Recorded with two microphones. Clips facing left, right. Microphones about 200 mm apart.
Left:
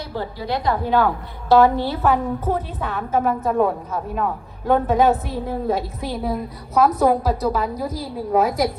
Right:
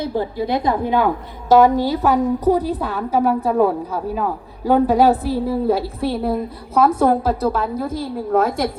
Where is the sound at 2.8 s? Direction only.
Centre (ahead or behind).